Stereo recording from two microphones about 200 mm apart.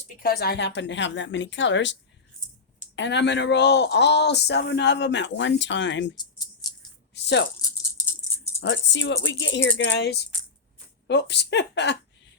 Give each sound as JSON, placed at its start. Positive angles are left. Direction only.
{"t": 0.2, "sound": "speech", "side_deg": 50}
{"t": 6.1, "sound": "a sound", "side_deg": 20}
{"t": 7.1, "sound": "speech", "side_deg": 60}
{"t": 8.6, "sound": "speech", "side_deg": 65}